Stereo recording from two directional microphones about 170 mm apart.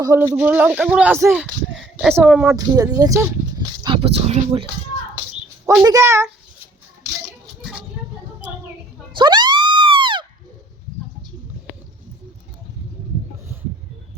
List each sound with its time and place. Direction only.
0.0 s speech: 20° right (ahead or behind)
1.7 s a sound: centre (ahead or behind)
2.1 s speech: 5° right (ahead or behind)
2.6 s speech: 20° right (ahead or behind)
3.8 s speech: 35° right (ahead or behind)
5.8 s speech: 20° right (ahead or behind)
9.1 s music: 25° right (ahead or behind)